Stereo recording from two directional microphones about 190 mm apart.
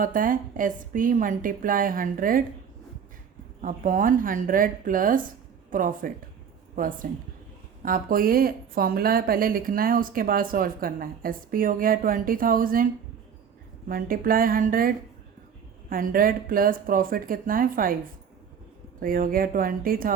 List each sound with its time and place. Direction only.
0.0 s a woman's voice: 45° right (ahead or behind)
3.6 s a woman's voice: 45° right (ahead or behind)
18.9 s a woman's voice: 50° right (ahead or behind)